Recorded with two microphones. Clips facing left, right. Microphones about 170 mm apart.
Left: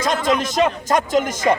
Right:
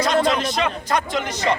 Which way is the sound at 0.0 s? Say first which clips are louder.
Right 1 dB; 45° left (ahead or behind).